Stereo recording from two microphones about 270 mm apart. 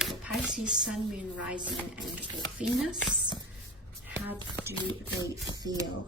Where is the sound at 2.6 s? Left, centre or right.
Centre.